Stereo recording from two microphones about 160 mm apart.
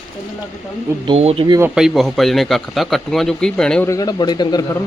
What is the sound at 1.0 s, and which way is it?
Speech, 40° right (ahead or behind).